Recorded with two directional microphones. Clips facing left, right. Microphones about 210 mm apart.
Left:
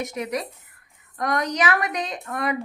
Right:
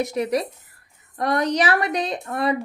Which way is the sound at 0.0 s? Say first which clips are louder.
Right 5 dB; 35° right (ahead or behind).